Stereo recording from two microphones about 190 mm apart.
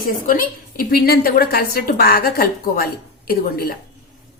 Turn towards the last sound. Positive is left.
turn(degrees=55)  # may be behind; listen again after turning